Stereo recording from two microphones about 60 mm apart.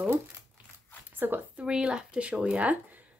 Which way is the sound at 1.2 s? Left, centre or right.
Right.